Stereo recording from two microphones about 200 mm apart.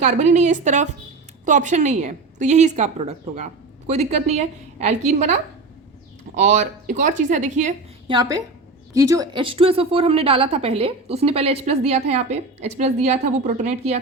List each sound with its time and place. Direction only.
0.0 s a woman's voice: 35° right (ahead or behind)
8.0 s a woman's voice: 20° right (ahead or behind)